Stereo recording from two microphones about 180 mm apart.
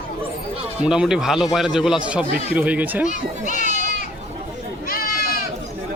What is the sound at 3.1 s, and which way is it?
Speech, 45° left (ahead or behind).